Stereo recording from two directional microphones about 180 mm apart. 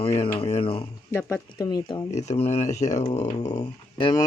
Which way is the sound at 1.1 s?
15° left (ahead or behind).